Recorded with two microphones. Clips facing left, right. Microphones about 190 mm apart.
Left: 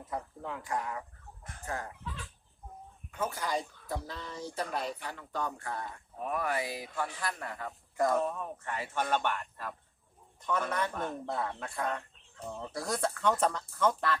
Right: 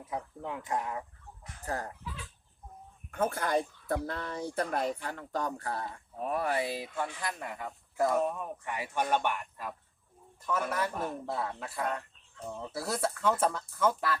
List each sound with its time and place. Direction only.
0.0 s speech: 15° right (ahead or behind)
1.6 s speech: 35° right (ahead or behind)
3.1 s speech: 55° right (ahead or behind); by 14.2 s 5° right (ahead or behind)